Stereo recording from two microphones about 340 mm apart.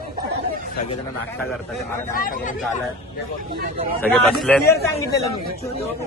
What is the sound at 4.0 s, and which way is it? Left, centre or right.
A man's voice, centre.